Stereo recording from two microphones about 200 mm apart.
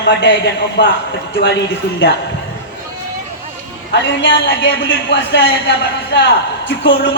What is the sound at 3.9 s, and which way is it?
A man's voice, 60° left (ahead or behind).